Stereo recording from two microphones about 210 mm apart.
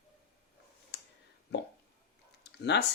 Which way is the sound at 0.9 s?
50° left (ahead or behind).